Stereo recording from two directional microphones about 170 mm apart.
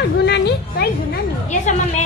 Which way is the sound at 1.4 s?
45° left (ahead or behind).